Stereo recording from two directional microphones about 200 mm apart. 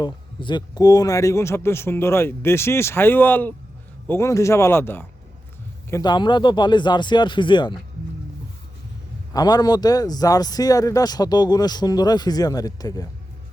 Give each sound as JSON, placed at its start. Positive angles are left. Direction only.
{"t": 0.0, "sound": "a man's voice", "side_deg": 25}
{"t": 9.3, "sound": "a man's voice", "side_deg": 20}